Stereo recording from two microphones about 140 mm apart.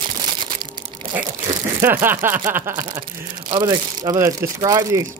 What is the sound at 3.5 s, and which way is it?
Speech, 30° right (ahead or behind).